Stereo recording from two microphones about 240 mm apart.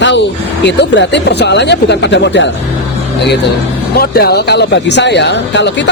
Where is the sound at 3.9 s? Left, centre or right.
Left.